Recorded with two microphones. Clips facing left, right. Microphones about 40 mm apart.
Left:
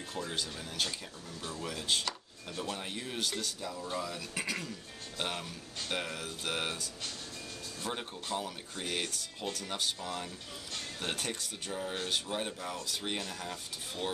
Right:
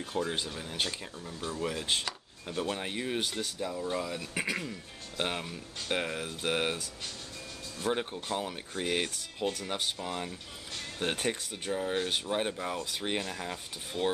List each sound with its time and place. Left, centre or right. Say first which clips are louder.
0.1 s speech: right 5 dB; right
7.9 s speech: right 5 dB; centre